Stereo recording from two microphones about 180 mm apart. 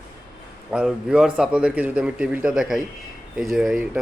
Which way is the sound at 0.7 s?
5° right (ahead or behind).